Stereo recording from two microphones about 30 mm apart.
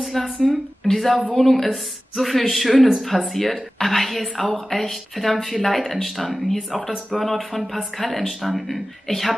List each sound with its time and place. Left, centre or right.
0.2 s a woman's voice: centre
0.9 s a woman's voice: centre
9.0 s speech: centre